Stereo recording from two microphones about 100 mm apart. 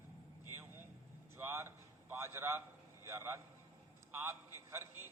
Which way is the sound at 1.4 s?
25° right (ahead or behind).